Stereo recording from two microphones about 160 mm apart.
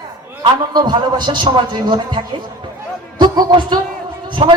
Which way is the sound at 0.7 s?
25° right (ahead or behind).